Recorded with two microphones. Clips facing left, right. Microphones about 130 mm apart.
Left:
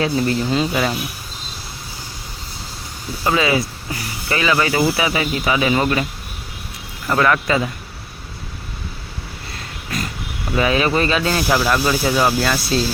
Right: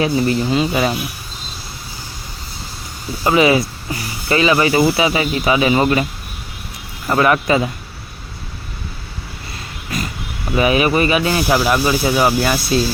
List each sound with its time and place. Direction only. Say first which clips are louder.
0.0 s speech: right 2 dB; 10° right (ahead or behind)
3.2 s speech: right 4 dB; 20° right (ahead or behind)
7.1 s speech: right 2 dB; 20° right (ahead or behind)
10.5 s speech: right 2 dB; 15° right (ahead or behind)